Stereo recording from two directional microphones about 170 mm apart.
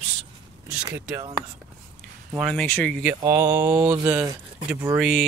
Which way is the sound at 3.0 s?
10° right (ahead or behind).